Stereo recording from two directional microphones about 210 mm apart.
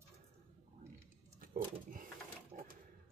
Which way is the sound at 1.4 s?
40° right (ahead or behind).